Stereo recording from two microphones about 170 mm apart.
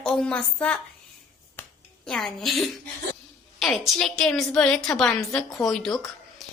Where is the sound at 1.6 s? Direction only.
10° left (ahead or behind).